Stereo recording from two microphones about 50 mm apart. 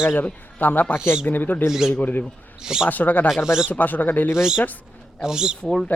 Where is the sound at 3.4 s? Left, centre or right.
Centre.